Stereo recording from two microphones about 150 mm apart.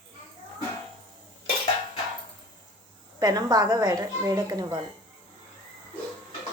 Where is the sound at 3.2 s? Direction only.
25° right (ahead or behind).